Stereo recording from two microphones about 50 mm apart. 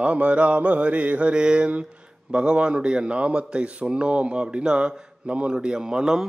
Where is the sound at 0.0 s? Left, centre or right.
Right.